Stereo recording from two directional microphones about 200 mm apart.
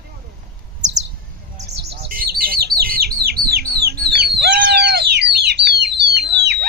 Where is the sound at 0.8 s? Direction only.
35° right (ahead or behind).